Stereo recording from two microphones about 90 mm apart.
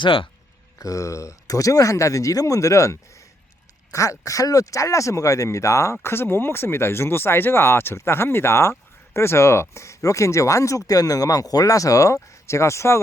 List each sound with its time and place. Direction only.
0.0 s speech: 75° left (ahead or behind)
0.8 s speech: 35° left (ahead or behind)